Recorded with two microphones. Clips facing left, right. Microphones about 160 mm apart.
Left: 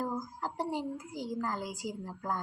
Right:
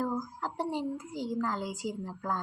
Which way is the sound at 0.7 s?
10° left (ahead or behind).